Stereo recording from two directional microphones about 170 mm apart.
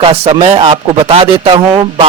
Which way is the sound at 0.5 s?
35° right (ahead or behind).